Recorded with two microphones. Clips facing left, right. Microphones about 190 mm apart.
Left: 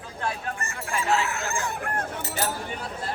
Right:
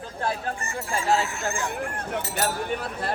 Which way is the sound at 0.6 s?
60° left (ahead or behind).